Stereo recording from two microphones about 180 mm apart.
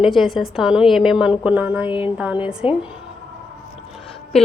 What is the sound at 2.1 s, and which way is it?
Speech, 10° right (ahead or behind).